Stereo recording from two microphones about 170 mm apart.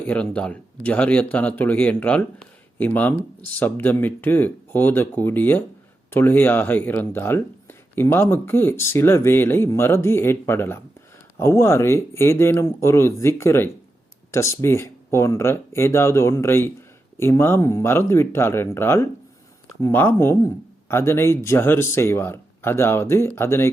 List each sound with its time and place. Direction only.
0.0 s speech: 10° left (ahead or behind)